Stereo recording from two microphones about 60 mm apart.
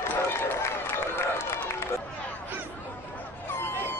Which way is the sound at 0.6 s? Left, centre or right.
Left.